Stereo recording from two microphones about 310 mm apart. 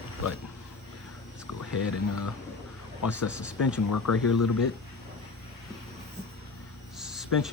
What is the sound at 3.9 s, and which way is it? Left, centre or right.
Speech, left.